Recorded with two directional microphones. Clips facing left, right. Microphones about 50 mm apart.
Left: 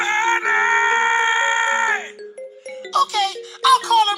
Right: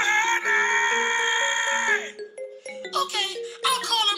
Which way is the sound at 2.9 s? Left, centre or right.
Left.